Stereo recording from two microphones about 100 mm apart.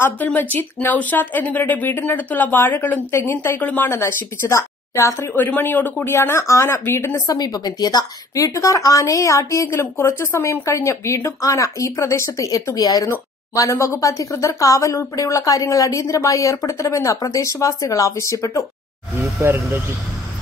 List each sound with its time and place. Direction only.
0.0 s speech: 15° left (ahead or behind)
7.3 s speech: 40° left (ahead or behind)
19.1 s speech: 25° right (ahead or behind)